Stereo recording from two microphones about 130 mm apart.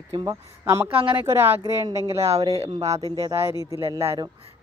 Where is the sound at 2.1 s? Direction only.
55° right (ahead or behind).